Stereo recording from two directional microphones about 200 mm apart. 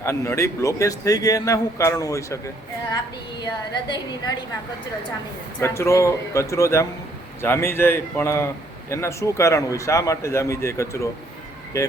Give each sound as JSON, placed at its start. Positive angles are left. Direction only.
{"t": 0.0, "sound": "a man's voice", "side_deg": 15}
{"t": 5.5, "sound": "a man's voice", "side_deg": 10}